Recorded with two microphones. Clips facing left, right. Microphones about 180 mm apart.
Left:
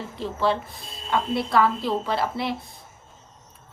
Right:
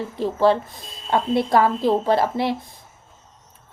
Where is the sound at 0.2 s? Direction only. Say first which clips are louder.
Right 6 dB; 45° right (ahead or behind).